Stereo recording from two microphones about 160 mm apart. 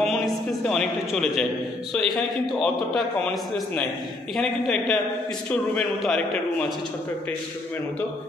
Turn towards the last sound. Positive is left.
turn(degrees=5)  # may be behind; listen again after turning